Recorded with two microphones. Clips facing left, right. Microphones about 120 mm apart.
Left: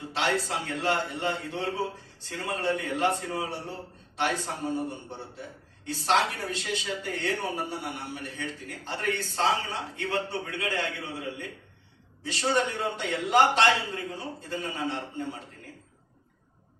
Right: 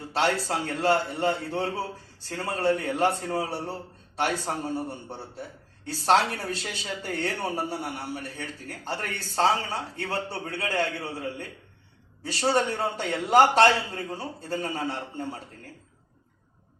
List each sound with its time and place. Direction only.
0.1 s speech: 40° right (ahead or behind)